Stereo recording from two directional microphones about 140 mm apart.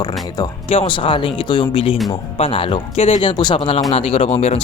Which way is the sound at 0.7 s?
40° left (ahead or behind).